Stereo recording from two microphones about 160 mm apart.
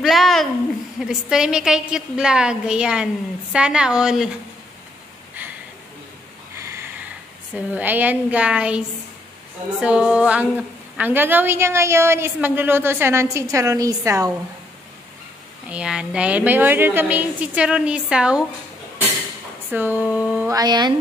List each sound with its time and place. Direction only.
0.0 s a sound: centre (ahead or behind)
1.0 s a woman's voice: 5° right (ahead or behind)
7.5 s a woman's voice: 10° right (ahead or behind)
15.7 s a woman's voice: 5° right (ahead or behind)
19.7 s a woman's voice: 10° right (ahead or behind)
20.4 s speech: 25° right (ahead or behind)